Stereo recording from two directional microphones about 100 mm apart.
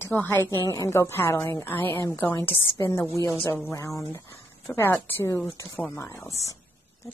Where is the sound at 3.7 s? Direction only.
35° left (ahead or behind).